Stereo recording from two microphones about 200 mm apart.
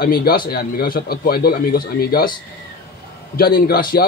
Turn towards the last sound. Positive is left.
turn(degrees=50)  # may be behind; listen again after turning